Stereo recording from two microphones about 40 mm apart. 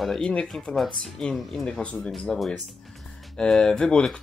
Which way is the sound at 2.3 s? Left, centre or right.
Centre.